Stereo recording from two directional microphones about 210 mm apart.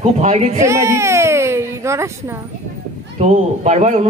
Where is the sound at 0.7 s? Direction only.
15° right (ahead or behind).